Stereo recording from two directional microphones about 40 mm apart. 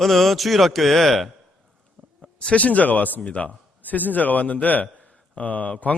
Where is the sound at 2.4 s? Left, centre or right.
Left.